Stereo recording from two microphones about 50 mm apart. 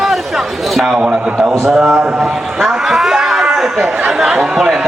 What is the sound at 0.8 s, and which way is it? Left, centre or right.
A man's voice, centre.